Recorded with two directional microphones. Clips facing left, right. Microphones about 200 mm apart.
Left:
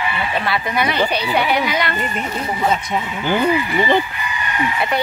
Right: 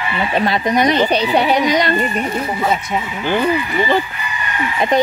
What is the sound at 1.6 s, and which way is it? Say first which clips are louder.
Speech: right 6 dB; 35° right (ahead or behind).